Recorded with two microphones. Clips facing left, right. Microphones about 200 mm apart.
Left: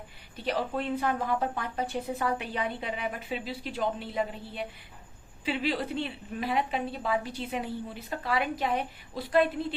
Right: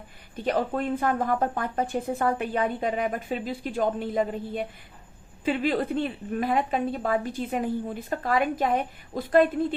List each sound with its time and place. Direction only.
0.3 s speech: 50° right (ahead or behind)